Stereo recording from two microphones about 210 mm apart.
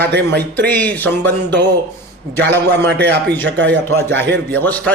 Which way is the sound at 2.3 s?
55° right (ahead or behind).